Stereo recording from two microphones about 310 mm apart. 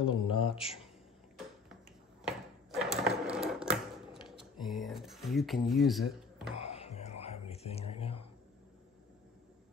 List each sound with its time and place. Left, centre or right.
0.0 s speech: centre
2.2 s sewing machine: centre
6.6 s music: centre